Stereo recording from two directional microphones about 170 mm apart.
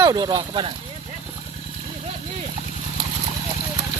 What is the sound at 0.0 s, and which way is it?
Speech, 20° right (ahead or behind).